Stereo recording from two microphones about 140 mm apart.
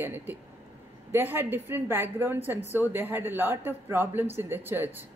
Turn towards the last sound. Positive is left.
turn(degrees=-15)  # may be behind; listen again after turning